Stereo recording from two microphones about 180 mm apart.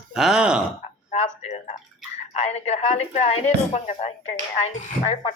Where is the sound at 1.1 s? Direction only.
35° left (ahead or behind).